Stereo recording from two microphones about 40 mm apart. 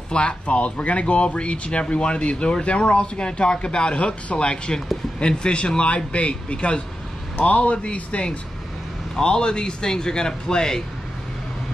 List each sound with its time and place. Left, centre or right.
0.1 s speech: left
7.3 s a man's voice: left; by 10.8 s centre